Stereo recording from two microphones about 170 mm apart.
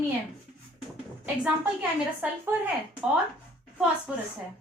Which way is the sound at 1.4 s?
10° right (ahead or behind).